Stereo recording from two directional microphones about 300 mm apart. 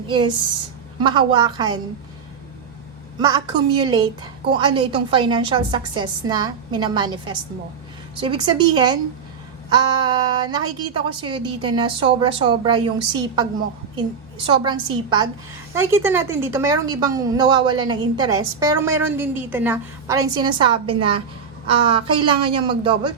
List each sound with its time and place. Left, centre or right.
0.1 s a woman's voice: centre
3.2 s a woman's voice: centre